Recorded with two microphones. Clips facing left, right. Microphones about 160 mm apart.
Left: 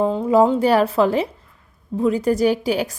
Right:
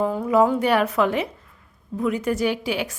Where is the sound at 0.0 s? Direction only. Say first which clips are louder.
Left 3 dB; 25° left (ahead or behind).